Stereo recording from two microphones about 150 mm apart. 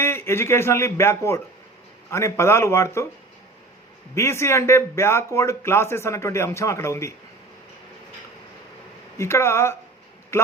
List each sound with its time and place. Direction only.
0.0 s a man's voice: 15° left (ahead or behind)
4.1 s a man's voice: 20° left (ahead or behind)
9.1 s a man's voice: 20° left (ahead or behind)